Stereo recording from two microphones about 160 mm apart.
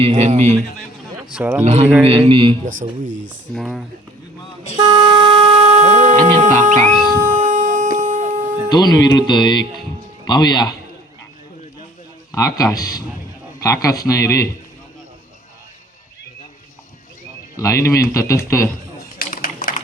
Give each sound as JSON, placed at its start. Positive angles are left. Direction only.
{"t": 0.0, "sound": "speech", "side_deg": -40}
{"t": 1.0, "sound": "a sound", "side_deg": -5}
{"t": 1.6, "sound": "speech", "side_deg": -45}
{"t": 2.0, "sound": "a man's voice", "side_deg": -35}
{"t": 3.5, "sound": "speech", "side_deg": 0}
{"t": 4.8, "sound": "shofar", "side_deg": -30}
{"t": 6.4, "sound": "speech", "side_deg": -50}
{"t": 7.2, "sound": "wind instrument", "side_deg": -50}
{"t": 7.9, "sound": "a sound", "side_deg": -50}
{"t": 8.7, "sound": "a man's voice", "side_deg": 25}
{"t": 12.3, "sound": "a man's voice", "side_deg": 20}
{"t": 17.6, "sound": "a man's voice", "side_deg": 20}
{"t": 19.0, "sound": "a sound", "side_deg": 65}